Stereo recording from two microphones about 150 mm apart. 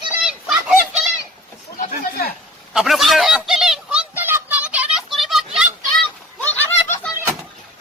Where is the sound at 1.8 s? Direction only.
85° left.